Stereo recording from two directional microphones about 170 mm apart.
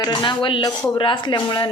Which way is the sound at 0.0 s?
25° left (ahead or behind).